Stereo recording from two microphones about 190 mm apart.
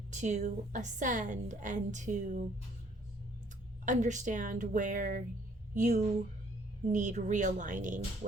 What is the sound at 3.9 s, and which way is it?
A woman's voice, 40° right (ahead or behind).